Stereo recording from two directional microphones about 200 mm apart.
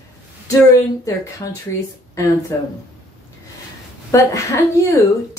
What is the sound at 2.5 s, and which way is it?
Speech, 15° left (ahead or behind).